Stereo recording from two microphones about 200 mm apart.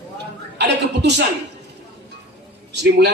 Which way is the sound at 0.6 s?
55° right (ahead or behind).